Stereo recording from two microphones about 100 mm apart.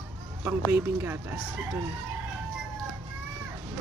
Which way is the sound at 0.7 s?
20° right (ahead or behind).